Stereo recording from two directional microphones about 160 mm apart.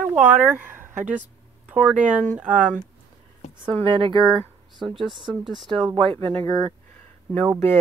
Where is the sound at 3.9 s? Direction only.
30° right (ahead or behind).